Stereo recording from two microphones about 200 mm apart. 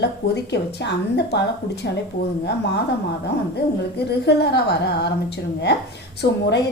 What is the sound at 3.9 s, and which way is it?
A woman's voice, 55° left (ahead or behind).